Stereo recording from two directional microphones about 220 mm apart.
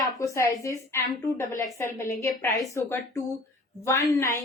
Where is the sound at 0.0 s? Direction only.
15° left (ahead or behind).